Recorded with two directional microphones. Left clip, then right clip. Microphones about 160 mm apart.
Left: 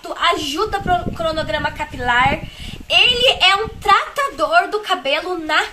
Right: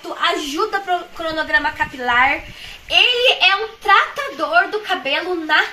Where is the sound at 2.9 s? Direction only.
10° left (ahead or behind).